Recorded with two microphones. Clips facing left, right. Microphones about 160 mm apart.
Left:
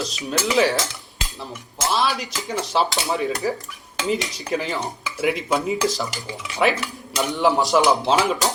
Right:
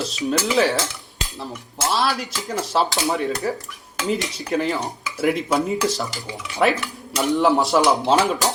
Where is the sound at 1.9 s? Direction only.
Centre (ahead or behind).